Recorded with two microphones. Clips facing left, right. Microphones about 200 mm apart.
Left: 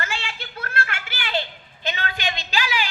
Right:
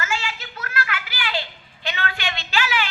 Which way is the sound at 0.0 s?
30° left (ahead or behind).